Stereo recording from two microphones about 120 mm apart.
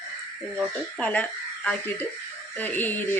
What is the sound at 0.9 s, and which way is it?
Speech, 10° left (ahead or behind).